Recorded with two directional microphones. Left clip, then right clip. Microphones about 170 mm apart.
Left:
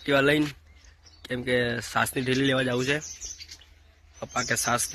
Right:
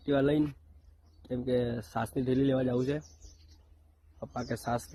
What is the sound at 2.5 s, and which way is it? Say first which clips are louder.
Speech: left 4 dB; 25° left (ahead or behind).